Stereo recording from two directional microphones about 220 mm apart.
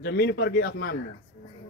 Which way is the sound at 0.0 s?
50° left (ahead or behind).